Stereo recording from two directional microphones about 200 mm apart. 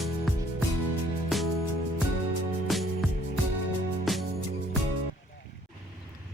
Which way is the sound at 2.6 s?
Centre (ahead or behind).